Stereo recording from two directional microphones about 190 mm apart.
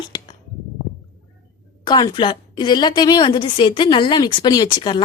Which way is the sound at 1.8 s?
20° left (ahead or behind).